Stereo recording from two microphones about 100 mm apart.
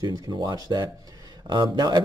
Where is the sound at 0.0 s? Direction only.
45° right (ahead or behind).